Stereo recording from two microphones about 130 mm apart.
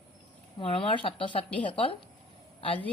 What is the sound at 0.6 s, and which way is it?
Speech, 45° left (ahead or behind).